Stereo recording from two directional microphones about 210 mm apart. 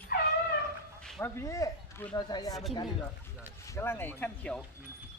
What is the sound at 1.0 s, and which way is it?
Speech, 5° left (ahead or behind).